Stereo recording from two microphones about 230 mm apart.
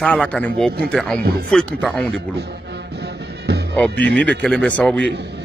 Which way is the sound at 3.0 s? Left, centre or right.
Right.